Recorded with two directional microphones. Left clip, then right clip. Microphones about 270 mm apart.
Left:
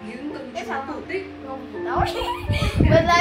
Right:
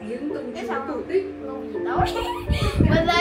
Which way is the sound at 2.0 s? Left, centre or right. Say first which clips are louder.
Left 1 dB; centre.